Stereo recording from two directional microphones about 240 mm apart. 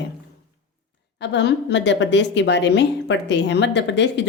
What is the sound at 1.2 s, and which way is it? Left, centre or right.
A woman's voice, left.